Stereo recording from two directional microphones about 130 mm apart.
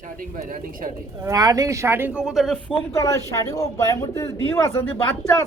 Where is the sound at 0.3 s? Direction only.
90° right.